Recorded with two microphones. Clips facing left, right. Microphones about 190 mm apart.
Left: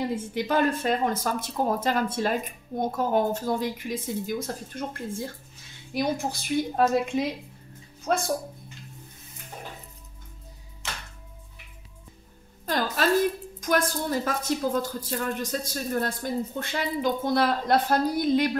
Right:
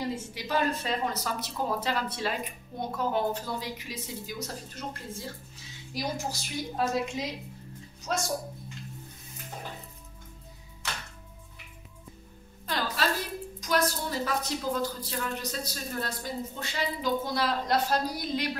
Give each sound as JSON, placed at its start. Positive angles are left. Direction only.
{"t": 0.1, "sound": "a woman's voice", "side_deg": 55}
{"t": 12.6, "sound": "a sound", "side_deg": 45}
{"t": 13.6, "sound": "a woman's voice", "side_deg": 50}